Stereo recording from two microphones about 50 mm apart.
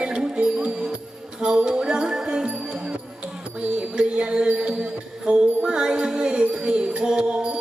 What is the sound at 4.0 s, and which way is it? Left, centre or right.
Music, centre.